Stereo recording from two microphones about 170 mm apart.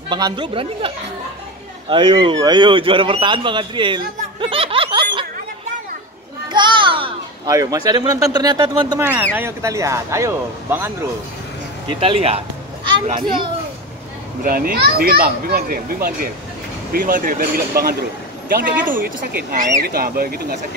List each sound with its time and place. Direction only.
0.1 s a man's voice: 25° right (ahead or behind)
6.5 s children playing: 25° right (ahead or behind)
7.5 s speech: 20° right (ahead or behind)
12.0 s speech: 35° right (ahead or behind)
14.4 s a child's voice: 60° right (ahead or behind)